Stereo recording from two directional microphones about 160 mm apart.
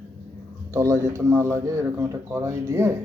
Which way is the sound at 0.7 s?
20° right (ahead or behind).